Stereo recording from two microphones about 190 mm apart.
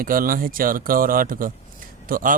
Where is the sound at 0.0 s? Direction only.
45° right (ahead or behind).